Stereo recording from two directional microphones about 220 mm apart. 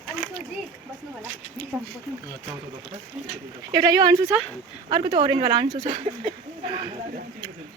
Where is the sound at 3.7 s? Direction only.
15° right (ahead or behind).